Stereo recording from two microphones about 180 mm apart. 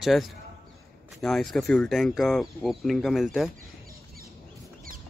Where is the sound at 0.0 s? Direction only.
Centre (ahead or behind).